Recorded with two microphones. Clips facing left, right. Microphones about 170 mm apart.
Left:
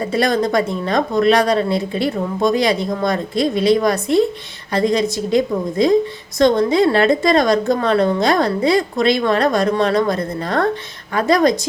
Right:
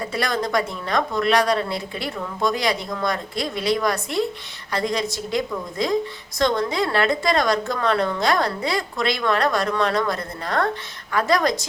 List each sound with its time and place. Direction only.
0.0 s a woman's voice: 25° left (ahead or behind)